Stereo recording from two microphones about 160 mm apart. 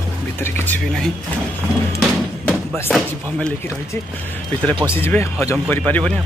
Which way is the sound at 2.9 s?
5° left (ahead or behind).